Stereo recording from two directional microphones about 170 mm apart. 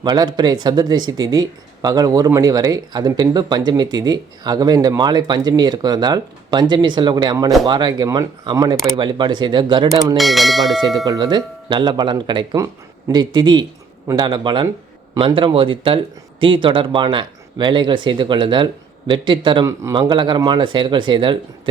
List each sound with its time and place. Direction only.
0.0 s speech: 25° right (ahead or behind)
10.2 s speech: centre (ahead or behind)
11.0 s speech: 25° right (ahead or behind)